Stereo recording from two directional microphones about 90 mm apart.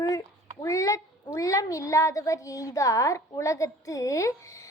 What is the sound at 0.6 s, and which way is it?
A child's voice, 40° left (ahead or behind).